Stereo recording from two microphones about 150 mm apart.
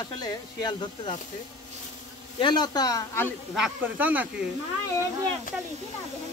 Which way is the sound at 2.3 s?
30° left (ahead or behind).